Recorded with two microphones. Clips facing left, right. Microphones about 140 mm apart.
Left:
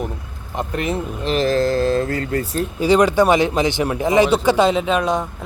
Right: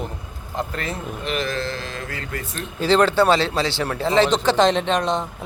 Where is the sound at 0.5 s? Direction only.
20° left (ahead or behind).